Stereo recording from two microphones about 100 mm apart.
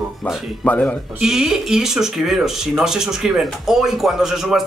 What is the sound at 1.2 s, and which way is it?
Speech, 5° right (ahead or behind).